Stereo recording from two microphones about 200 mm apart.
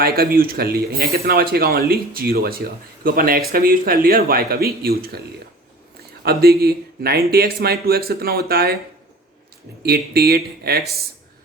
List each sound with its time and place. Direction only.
0.0 s speech: 50° right (ahead or behind)
9.8 s speech: 50° right (ahead or behind)